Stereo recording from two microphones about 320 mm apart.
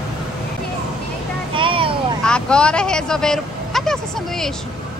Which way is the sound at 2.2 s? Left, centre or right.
Centre.